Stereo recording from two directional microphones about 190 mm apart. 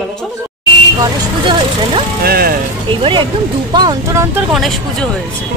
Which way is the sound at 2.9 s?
25° right (ahead or behind).